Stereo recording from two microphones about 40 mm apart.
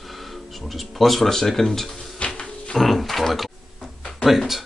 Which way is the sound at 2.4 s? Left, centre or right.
Left.